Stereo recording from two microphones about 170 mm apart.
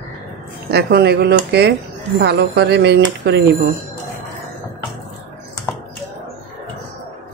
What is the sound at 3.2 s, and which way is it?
Speech, 90° right.